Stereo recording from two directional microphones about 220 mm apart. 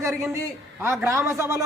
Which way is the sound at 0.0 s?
15° right (ahead or behind).